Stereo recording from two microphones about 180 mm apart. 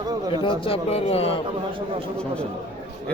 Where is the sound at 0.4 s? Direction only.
30° left (ahead or behind).